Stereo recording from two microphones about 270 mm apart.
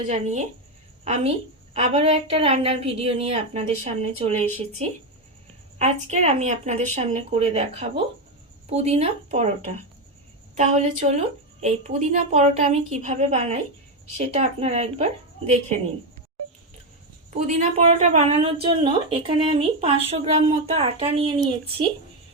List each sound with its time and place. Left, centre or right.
0.1 s a woman's voice: right
10.5 s a woman's voice: right
17.3 s a woman's voice: right